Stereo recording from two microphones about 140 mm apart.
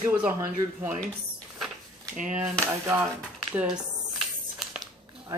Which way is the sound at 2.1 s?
65° right (ahead or behind).